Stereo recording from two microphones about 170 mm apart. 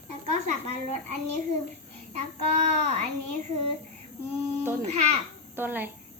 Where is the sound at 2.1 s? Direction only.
45° right (ahead or behind).